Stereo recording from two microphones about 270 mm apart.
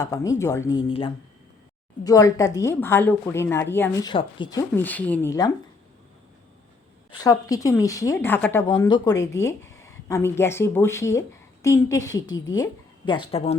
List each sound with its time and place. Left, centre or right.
0.0 s speech: centre
7.2 s speech: centre